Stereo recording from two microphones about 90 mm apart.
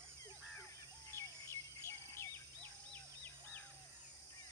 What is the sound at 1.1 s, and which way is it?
Bird vocalization, 30° left (ahead or behind).